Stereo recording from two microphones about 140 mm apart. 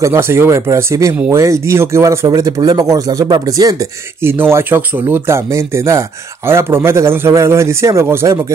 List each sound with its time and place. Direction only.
0.0 s speech: 20° right (ahead or behind)
4.2 s speech: 15° right (ahead or behind)